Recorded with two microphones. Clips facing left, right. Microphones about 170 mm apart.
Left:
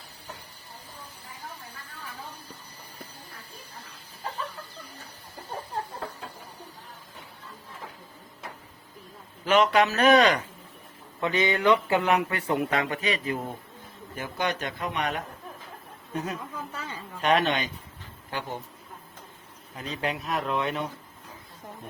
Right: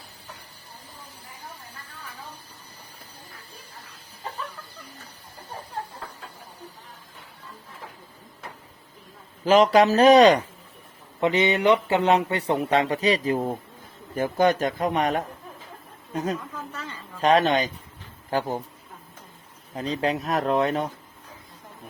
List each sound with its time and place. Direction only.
9.4 s speech: 35° right (ahead or behind)
16.7 s a sound: 10° left (ahead or behind)
17.2 s speech: 40° right (ahead or behind)
19.7 s speech: 35° right (ahead or behind)